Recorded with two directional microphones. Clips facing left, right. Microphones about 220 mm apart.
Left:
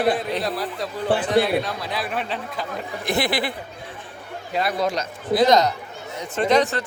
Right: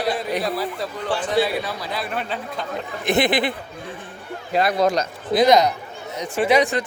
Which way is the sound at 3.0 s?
20° right (ahead or behind).